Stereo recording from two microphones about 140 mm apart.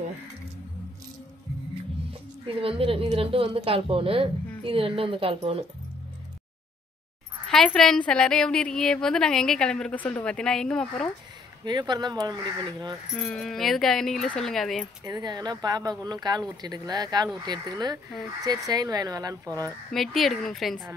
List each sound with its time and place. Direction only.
2.4 s a woman's voice: 40° right (ahead or behind)
7.4 s a woman's voice: 5° left (ahead or behind)
11.6 s a woman's voice: 30° right (ahead or behind)
13.2 s a woman's voice: 5° left (ahead or behind)
15.0 s a woman's voice: 30° right (ahead or behind)
19.9 s a woman's voice: centre (ahead or behind)